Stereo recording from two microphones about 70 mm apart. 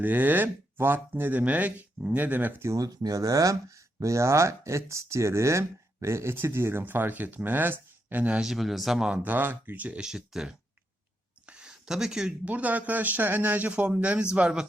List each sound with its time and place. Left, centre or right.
0.0 s speech: right
2.6 s speech: right
8.4 s speech: centre
9.0 s speech: right
10.1 s speech: centre
11.4 s a sound: centre
12.5 s speech: right